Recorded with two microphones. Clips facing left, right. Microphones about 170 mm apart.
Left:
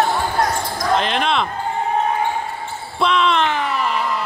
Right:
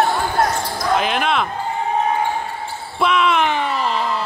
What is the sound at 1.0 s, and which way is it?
Speech, 5° right (ahead or behind).